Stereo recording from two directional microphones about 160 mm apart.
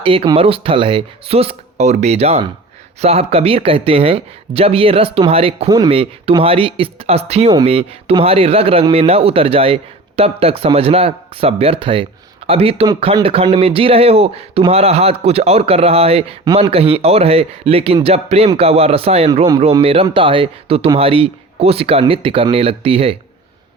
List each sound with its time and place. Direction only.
0.0 s speech: 35° right (ahead or behind)
5.6 s speech: 20° right (ahead or behind)
5.9 s speech: 35° right (ahead or behind)